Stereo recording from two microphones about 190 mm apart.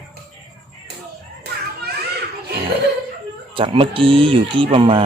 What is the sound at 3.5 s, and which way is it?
Speech, 30° right (ahead or behind).